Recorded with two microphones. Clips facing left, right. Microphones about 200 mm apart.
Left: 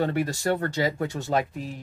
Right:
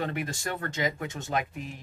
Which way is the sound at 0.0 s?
35° left (ahead or behind).